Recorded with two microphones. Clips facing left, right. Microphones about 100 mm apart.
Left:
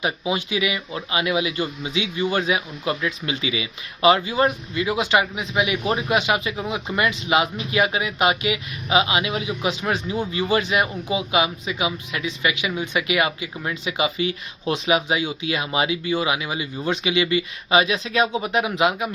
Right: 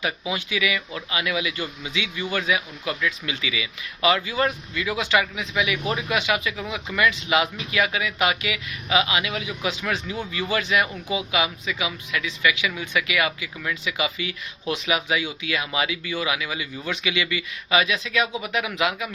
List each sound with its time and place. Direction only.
0.0 s speech: 25° left (ahead or behind)